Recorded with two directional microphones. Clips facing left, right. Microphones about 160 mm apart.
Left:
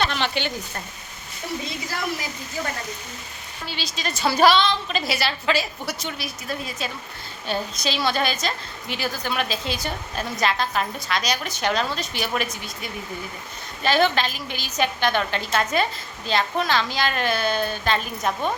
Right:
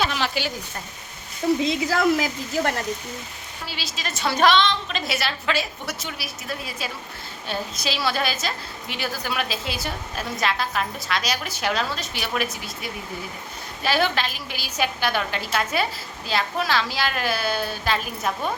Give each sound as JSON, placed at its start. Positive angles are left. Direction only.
{"t": 0.0, "sound": "a sound", "side_deg": -5}
{"t": 1.6, "sound": "a woman's voice", "side_deg": -90}
{"t": 3.7, "sound": "a woman's voice", "side_deg": -5}